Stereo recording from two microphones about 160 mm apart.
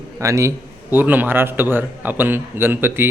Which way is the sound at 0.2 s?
20° right (ahead or behind).